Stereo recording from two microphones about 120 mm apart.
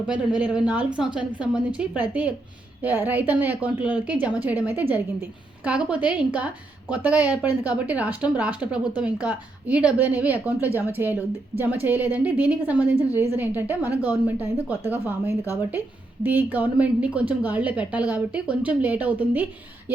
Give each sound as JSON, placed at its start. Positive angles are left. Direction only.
{"t": 0.1, "sound": "a woman's voice", "side_deg": -10}